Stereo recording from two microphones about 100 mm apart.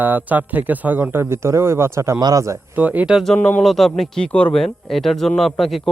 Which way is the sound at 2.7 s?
15° right (ahead or behind).